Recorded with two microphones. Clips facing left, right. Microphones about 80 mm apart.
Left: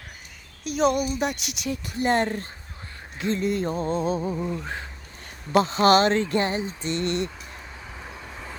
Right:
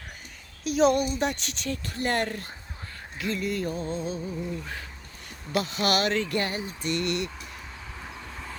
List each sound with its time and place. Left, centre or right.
0.6 s a woman's voice: centre; by 3.8 s left
3.8 s a sound: left
5.5 s speech: left
7.9 s vehicle: centre